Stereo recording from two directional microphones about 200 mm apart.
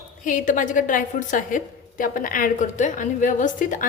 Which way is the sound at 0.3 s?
40° left (ahead or behind).